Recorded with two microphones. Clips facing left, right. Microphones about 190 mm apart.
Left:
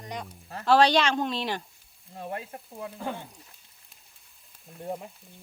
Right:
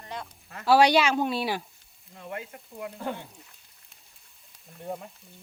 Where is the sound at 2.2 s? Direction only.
35° left (ahead or behind).